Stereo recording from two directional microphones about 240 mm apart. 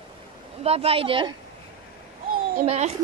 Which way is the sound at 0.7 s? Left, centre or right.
Right.